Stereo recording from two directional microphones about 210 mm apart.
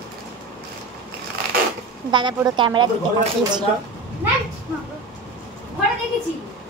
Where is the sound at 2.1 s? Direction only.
20° right (ahead or behind).